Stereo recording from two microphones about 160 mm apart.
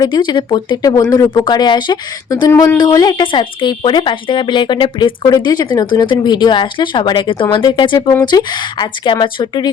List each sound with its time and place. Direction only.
0.0 s speech: 30° left (ahead or behind)
2.5 s speech: 15° left (ahead or behind)